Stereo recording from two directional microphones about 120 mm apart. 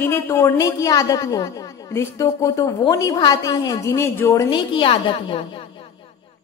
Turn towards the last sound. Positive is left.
turn(degrees=50)  # may be behind; listen again after turning